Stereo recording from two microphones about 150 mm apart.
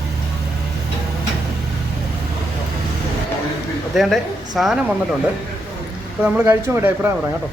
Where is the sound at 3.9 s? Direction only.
Centre (ahead or behind).